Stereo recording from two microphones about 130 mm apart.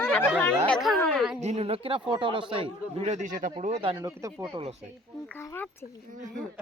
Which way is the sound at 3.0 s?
65° right (ahead or behind).